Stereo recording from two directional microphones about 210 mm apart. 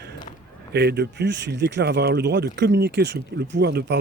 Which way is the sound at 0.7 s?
50° right (ahead or behind).